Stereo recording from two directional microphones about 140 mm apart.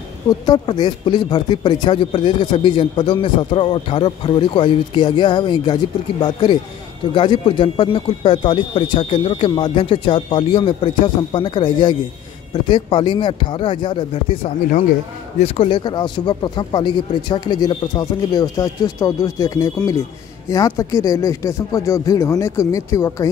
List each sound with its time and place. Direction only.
0.3 s speech: 30° left (ahead or behind)